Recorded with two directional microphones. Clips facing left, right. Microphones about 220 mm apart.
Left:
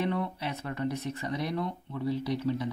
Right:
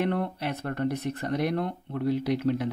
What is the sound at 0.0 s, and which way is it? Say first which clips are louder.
Speech: right 3 dB; 55° right (ahead or behind).